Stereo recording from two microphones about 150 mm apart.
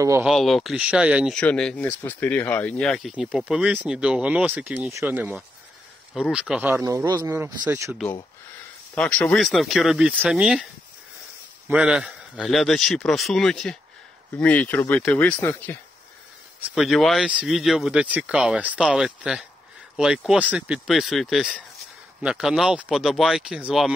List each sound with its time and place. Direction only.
0.2 s speech: centre (ahead or behind)
1.3 s speech: 5° left (ahead or behind)
6.7 s speech: 20° right (ahead or behind)
8.9 s speech: 10° left (ahead or behind)
11.7 s speech: 5° right (ahead or behind); by 15.8 s 15° left (ahead or behind)
16.7 s speech: centre (ahead or behind)